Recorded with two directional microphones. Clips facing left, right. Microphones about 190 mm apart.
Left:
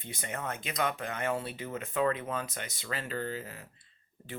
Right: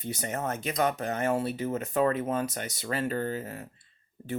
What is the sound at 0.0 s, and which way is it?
Speech, 40° right (ahead or behind).